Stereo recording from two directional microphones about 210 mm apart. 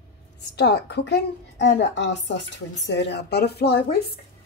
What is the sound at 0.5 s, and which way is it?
A woman's voice, 55° left (ahead or behind).